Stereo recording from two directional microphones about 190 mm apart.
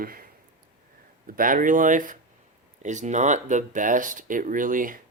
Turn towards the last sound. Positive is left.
turn(degrees=-45)  # may be behind; listen again after turning